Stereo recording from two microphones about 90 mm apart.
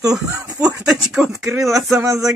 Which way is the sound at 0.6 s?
10° right (ahead or behind).